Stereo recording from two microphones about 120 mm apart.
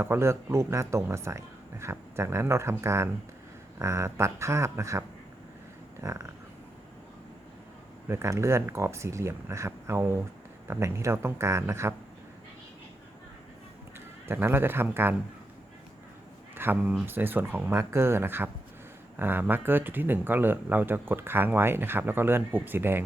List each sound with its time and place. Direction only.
0.0 s speech: 20° right (ahead or behind)
6.0 s a sound: 25° right (ahead or behind)
8.0 s speech: 20° right (ahead or behind)
14.3 s speech: 20° right (ahead or behind)
16.6 s speech: 15° right (ahead or behind)